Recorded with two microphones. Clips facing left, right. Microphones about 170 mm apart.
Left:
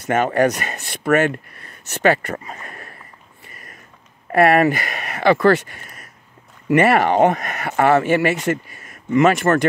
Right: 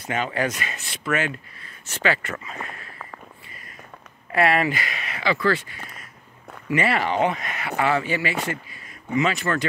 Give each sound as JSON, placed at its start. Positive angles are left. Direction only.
{"t": 0.1, "sound": "speech", "side_deg": 50}
{"t": 4.3, "sound": "speech", "side_deg": 50}